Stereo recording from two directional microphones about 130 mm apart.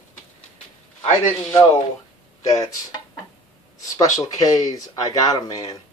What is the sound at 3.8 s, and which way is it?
Speech, 25° left (ahead or behind).